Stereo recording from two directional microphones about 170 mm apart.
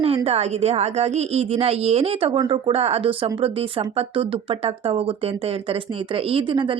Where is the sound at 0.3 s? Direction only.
40° right (ahead or behind).